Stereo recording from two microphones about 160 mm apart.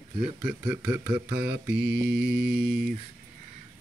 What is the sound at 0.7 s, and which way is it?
Mantra, 15° right (ahead or behind).